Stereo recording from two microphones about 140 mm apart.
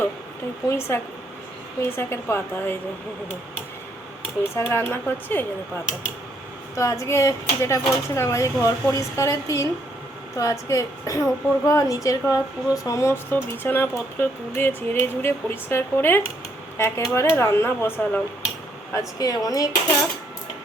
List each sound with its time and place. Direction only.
0.7 s speech: 15° left (ahead or behind)
4.5 s speech: 15° left (ahead or behind)
6.7 s a woman's voice: 20° left (ahead or behind)
18.9 s a woman's voice: 25° left (ahead or behind)